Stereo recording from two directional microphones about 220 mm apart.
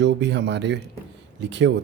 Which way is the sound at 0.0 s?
50° right (ahead or behind).